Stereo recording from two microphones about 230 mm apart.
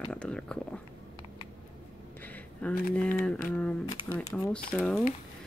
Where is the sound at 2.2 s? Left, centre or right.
Centre.